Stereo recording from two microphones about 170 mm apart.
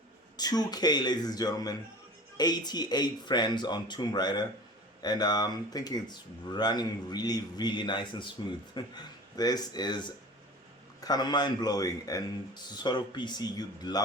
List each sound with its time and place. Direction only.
0.3 s speech: 25° left (ahead or behind)